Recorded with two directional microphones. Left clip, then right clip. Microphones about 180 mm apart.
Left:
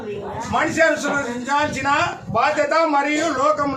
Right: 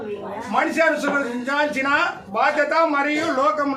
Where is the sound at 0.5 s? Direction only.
Centre (ahead or behind).